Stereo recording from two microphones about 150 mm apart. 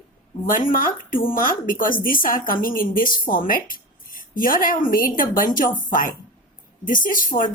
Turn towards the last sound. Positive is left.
turn(degrees=65)  # may be behind; listen again after turning